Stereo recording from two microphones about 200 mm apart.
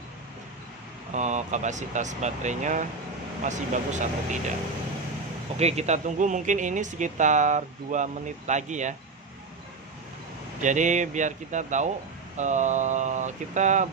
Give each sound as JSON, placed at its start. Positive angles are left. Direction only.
{"t": 1.1, "sound": "speech", "side_deg": -35}
{"t": 5.5, "sound": "speech", "side_deg": -35}
{"t": 10.6, "sound": "speech", "side_deg": -40}